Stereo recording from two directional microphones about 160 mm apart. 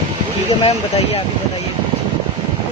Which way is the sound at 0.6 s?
35° left (ahead or behind).